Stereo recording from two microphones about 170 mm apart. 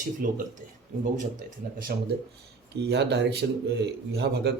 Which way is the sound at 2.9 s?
90° right.